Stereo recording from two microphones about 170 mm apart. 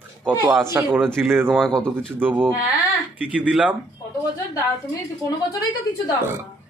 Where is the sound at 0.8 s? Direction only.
5° left (ahead or behind).